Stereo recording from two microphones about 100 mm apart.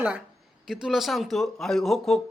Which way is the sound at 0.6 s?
5° right (ahead or behind).